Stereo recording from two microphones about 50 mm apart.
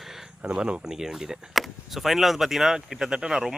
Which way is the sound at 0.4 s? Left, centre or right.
Right.